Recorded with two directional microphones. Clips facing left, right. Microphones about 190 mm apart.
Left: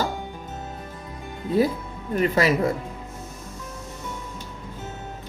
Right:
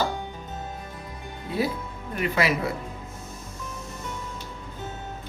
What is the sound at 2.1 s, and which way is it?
Speech, 40° left (ahead or behind).